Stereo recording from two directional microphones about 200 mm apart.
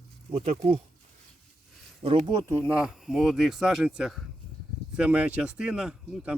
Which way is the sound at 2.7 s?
5° right (ahead or behind).